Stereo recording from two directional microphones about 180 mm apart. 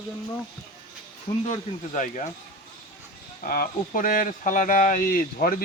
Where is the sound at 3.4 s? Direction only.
55° left (ahead or behind).